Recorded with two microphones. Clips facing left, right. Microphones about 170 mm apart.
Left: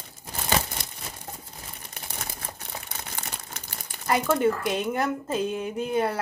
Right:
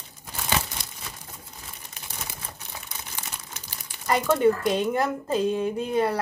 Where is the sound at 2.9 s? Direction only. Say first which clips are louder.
Left 2 dB; 55° left (ahead or behind).